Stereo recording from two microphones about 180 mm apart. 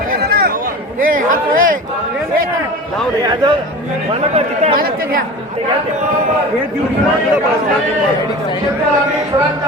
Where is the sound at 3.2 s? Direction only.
20° right (ahead or behind).